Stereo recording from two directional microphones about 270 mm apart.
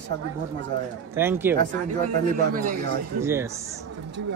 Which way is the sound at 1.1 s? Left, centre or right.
Centre.